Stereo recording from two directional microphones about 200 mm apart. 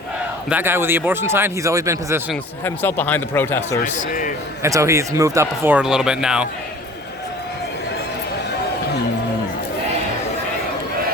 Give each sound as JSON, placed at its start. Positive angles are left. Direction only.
{"t": 0.5, "sound": "speech", "side_deg": -10}
{"t": 2.3, "sound": "speech", "side_deg": 10}
{"t": 3.8, "sound": "a man's voice", "side_deg": 40}
{"t": 4.6, "sound": "speech", "side_deg": -15}